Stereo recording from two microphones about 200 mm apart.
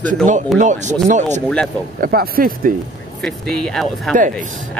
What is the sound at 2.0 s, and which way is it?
Speech, 50° right (ahead or behind).